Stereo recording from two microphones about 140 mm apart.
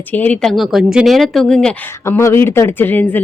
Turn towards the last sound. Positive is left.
turn(degrees=10)  # may be behind; listen again after turning